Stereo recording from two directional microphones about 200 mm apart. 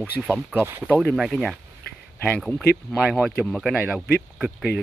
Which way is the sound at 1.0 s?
Centre (ahead or behind).